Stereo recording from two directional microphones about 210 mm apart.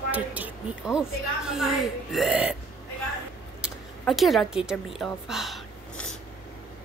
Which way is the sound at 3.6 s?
Centre (ahead or behind).